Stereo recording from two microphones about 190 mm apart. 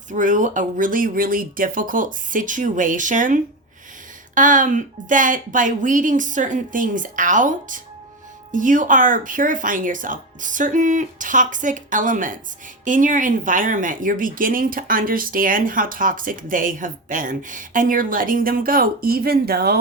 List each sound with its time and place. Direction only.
0.1 s speech: 40° right (ahead or behind)